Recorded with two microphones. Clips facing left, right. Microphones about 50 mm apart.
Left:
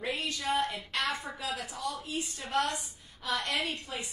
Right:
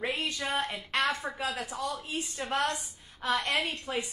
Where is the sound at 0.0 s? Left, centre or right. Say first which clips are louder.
Right 2 dB; right.